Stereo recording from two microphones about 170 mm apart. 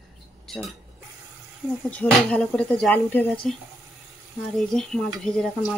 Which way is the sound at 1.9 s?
5° left (ahead or behind).